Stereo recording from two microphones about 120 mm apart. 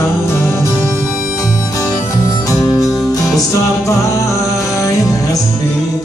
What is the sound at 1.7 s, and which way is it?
Music, 30° left (ahead or behind).